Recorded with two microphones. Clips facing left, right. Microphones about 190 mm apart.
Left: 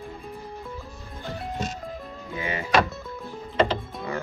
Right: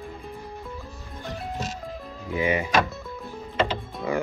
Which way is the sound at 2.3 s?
20° right (ahead or behind).